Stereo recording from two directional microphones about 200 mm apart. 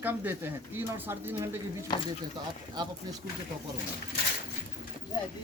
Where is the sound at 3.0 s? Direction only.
20° right (ahead or behind).